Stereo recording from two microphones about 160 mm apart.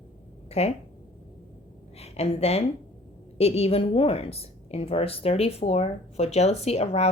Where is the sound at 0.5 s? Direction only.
40° left (ahead or behind).